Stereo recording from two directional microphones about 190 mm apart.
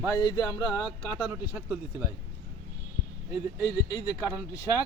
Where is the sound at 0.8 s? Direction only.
5° right (ahead or behind).